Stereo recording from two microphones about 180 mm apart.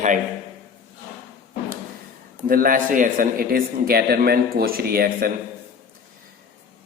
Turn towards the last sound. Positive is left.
turn(degrees=-55)  # may be behind; listen again after turning